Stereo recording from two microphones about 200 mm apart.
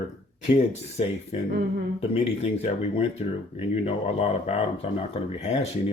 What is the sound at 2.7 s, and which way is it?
Speech, 30° left (ahead or behind).